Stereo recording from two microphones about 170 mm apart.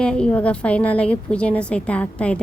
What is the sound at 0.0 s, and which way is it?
A woman's voice, 5° left (ahead or behind).